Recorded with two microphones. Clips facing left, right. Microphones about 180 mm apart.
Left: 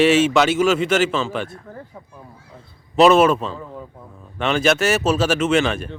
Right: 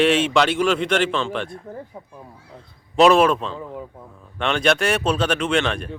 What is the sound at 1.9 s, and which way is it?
Speech, 15° right (ahead or behind).